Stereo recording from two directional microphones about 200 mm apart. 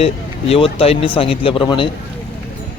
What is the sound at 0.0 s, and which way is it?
Speech, 30° left (ahead or behind).